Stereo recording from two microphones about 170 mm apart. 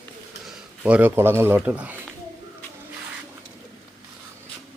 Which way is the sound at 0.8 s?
10° right (ahead or behind).